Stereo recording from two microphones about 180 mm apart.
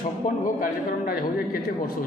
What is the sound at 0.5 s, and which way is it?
A man's voice, 50° left (ahead or behind).